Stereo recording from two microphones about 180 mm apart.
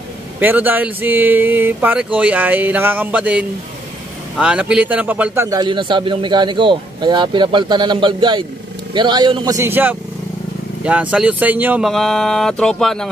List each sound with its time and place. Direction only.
0.4 s a man's voice: 10° right (ahead or behind)